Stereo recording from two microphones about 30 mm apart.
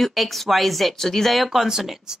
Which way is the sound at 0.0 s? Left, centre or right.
Centre.